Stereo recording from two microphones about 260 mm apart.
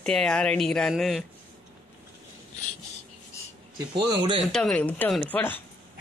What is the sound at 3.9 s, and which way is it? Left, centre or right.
Speech, centre.